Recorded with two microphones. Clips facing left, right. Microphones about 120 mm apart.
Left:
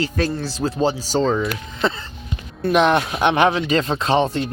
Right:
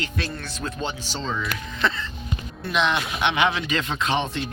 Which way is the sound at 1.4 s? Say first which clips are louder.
Left 5 dB; 30° left (ahead or behind).